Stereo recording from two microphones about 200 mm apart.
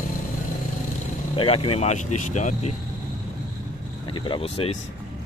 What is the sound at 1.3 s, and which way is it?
Speech, 30° left (ahead or behind).